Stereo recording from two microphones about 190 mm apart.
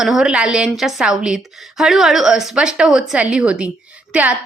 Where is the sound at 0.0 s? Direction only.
5° right (ahead or behind).